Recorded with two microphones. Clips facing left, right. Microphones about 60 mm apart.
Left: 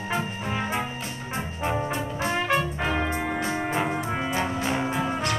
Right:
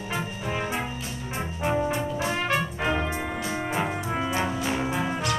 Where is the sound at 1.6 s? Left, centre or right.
Centre.